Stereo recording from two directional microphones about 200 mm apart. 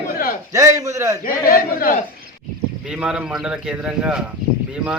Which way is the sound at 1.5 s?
45° left (ahead or behind).